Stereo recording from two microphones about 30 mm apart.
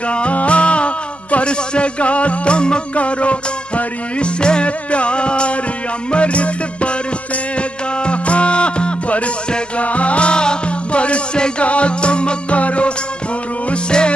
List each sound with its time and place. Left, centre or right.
0.1 s speech: left
2.9 s music: left
4.4 s music: left
9.8 s music: left
12.5 s music: left
13.8 s music: left